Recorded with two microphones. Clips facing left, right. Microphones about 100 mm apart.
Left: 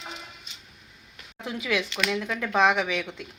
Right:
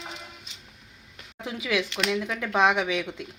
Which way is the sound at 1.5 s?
15° right (ahead or behind).